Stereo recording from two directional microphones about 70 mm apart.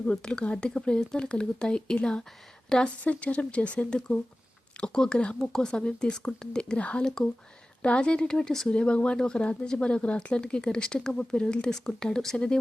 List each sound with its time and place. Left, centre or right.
0.1 s speech: centre